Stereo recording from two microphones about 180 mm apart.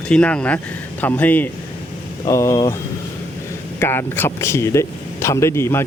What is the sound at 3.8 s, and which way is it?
Speech, 10° left (ahead or behind).